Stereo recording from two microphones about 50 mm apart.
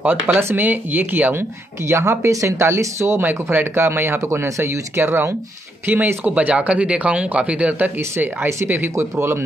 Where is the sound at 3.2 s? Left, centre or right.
Right.